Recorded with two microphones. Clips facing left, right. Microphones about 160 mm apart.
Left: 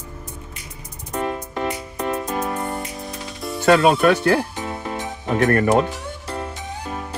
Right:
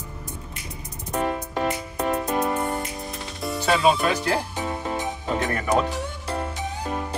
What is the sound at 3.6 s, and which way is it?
Speech, 60° left (ahead or behind).